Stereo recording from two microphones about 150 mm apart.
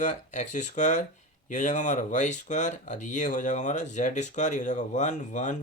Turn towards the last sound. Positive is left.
turn(degrees=55)  # may be behind; listen again after turning